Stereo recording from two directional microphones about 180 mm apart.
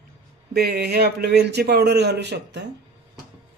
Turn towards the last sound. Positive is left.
turn(degrees=-70)  # may be behind; listen again after turning